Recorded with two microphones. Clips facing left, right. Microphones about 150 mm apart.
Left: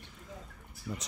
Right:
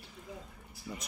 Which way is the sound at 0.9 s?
5° right (ahead or behind).